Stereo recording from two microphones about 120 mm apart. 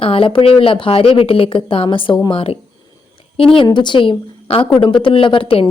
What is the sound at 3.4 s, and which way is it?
A woman's voice, 45° left (ahead or behind).